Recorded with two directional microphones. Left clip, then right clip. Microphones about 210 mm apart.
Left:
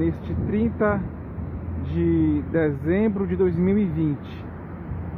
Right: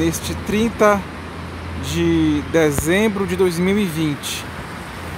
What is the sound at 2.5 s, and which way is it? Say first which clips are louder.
Speech: right 6 dB; 20° right (ahead or behind).